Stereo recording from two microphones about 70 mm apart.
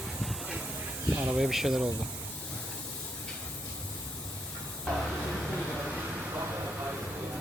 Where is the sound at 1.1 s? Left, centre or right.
Right.